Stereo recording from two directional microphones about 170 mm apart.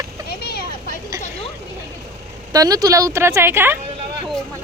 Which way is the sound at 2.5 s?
20° right (ahead or behind).